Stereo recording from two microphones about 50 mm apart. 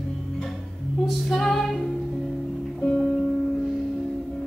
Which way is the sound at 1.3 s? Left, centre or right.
Centre.